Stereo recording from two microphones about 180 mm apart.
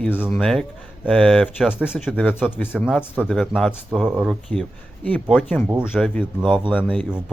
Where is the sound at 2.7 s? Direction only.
5° right (ahead or behind).